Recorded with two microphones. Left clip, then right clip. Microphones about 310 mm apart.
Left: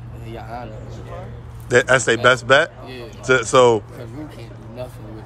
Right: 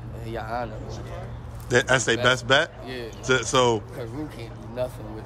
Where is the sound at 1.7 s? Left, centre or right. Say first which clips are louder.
Left 6 dB; centre.